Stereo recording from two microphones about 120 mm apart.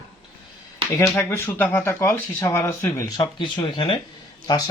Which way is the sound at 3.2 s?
40° left (ahead or behind).